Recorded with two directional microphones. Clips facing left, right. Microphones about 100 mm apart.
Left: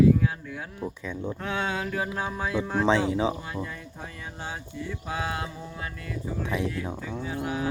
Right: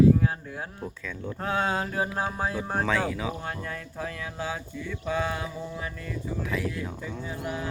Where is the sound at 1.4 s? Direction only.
35° right (ahead or behind).